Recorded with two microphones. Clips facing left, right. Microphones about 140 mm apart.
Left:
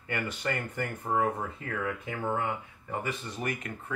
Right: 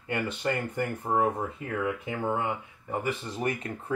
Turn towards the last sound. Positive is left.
turn(degrees=-30)  # may be behind; listen again after turning